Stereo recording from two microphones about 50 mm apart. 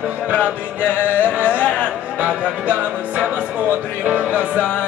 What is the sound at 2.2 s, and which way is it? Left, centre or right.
Music, right.